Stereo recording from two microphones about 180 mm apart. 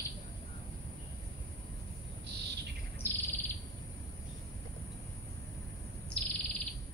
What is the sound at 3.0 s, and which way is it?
Bird, 10° left (ahead or behind).